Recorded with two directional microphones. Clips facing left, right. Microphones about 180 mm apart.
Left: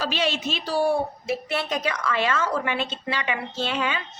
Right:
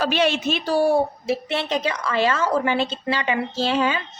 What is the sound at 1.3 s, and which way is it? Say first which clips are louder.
A woman's voice: right 3 dB; 25° right (ahead or behind).